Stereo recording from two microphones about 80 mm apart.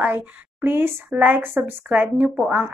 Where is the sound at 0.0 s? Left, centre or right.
Right.